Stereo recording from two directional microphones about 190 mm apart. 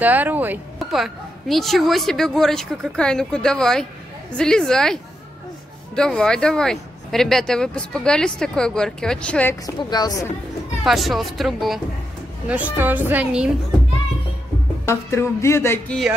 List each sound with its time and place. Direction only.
0.0 s speech: 10° right (ahead or behind)
5.9 s speech: 5° left (ahead or behind)
9.8 s a woman's voice: 20° left (ahead or behind)
10.8 s a woman's voice: centre (ahead or behind)
14.9 s a sound: 15° left (ahead or behind)